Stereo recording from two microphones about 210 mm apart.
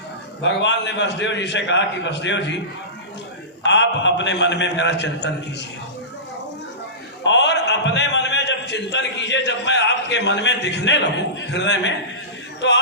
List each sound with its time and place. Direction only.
0.4 s a man's voice: 60° left (ahead or behind)
3.6 s a man's voice: 55° left (ahead or behind)
7.3 s a man's voice: 55° left (ahead or behind)